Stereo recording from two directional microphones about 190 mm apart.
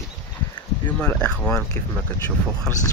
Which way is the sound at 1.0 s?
5° left (ahead or behind).